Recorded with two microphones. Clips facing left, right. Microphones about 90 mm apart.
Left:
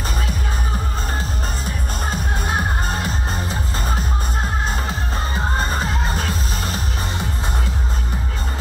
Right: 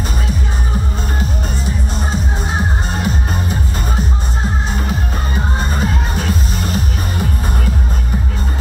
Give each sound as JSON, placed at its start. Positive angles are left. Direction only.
{"t": 2.9, "sound": "music", "side_deg": 35}
{"t": 5.7, "sound": "music", "side_deg": 40}